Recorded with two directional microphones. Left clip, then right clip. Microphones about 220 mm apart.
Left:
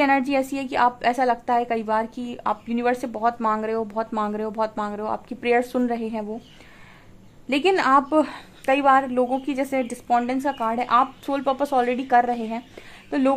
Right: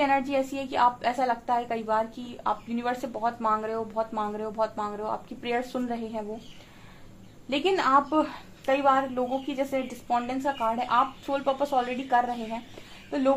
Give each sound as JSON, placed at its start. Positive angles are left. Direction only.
{"t": 0.0, "sound": "a woman's voice", "side_deg": 45}
{"t": 7.4, "sound": "a woman's voice", "side_deg": 45}